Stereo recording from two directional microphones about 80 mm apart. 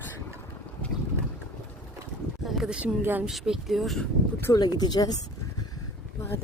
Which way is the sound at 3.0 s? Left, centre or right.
Right.